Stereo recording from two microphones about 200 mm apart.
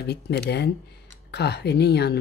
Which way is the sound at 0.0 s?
55° left (ahead or behind).